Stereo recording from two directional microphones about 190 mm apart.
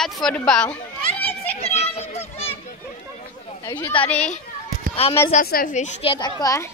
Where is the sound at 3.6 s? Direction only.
20° left (ahead or behind).